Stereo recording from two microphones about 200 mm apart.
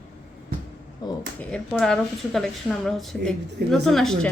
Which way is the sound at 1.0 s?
20° left (ahead or behind).